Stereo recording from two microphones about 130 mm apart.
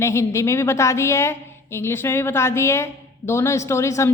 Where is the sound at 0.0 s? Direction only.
20° left (ahead or behind).